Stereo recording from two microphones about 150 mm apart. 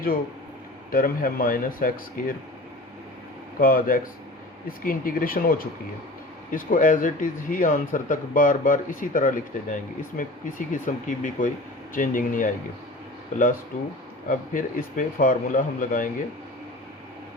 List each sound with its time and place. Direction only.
0.9 s speech: 70° left (ahead or behind)
3.6 s speech: 70° left (ahead or behind)
13.7 s speech: 65° left (ahead or behind)